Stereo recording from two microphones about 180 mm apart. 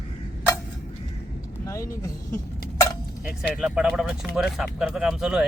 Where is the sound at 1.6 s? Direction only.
20° left (ahead or behind).